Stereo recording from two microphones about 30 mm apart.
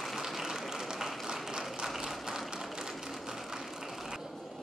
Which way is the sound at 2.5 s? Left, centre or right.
Centre.